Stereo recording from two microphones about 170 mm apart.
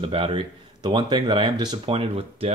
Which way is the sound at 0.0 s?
30° right (ahead or behind).